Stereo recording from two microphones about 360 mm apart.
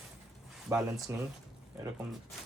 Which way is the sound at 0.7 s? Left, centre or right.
Centre.